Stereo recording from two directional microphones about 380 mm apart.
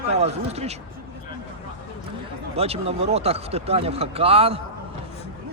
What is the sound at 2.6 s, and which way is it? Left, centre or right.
Speech, centre.